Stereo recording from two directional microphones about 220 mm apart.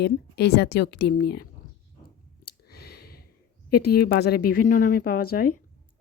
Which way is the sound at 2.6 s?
45° left (ahead or behind).